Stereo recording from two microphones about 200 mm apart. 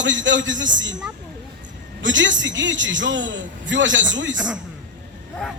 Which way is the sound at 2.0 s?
70° right (ahead or behind).